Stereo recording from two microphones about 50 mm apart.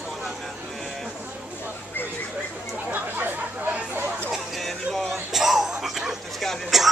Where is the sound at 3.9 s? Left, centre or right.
Right.